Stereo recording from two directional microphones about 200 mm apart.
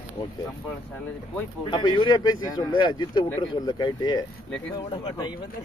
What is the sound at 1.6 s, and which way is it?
Speech, 25° left (ahead or behind).